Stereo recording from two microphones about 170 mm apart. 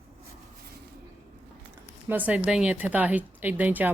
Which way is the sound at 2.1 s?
10° right (ahead or behind).